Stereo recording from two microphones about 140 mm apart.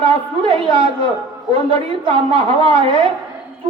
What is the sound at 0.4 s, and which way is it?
Music, 40° right (ahead or behind).